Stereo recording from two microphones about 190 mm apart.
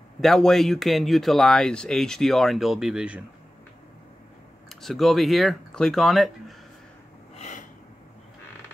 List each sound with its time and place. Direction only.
0.2 s speech: centre (ahead or behind)
4.6 s speech: centre (ahead or behind)
7.3 s snort: 40° left (ahead or behind)